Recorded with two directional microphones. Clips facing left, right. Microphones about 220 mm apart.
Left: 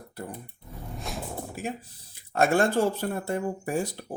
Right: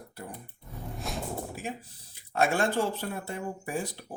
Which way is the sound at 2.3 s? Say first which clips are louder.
Left 4 dB; 45° left (ahead or behind).